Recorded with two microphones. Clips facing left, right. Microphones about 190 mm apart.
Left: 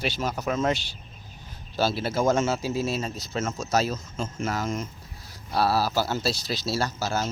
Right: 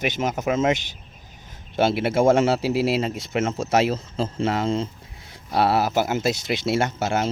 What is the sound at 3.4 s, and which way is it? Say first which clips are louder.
Speech: right 5 dB; 30° right (ahead or behind).